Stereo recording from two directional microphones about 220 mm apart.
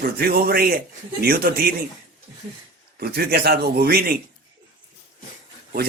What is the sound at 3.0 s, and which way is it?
Speech, 45° right (ahead or behind).